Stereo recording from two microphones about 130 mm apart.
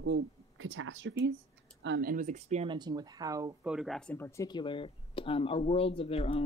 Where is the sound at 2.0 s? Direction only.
80° right; by 2.7 s 60° right (ahead or behind).